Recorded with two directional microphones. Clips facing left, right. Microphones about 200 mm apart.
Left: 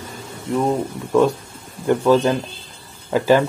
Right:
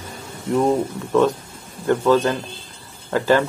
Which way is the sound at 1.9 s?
15° left (ahead or behind).